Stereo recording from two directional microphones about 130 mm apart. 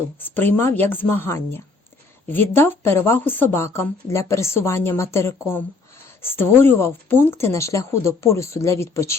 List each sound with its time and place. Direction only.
0.2 s speech: 15° left (ahead or behind)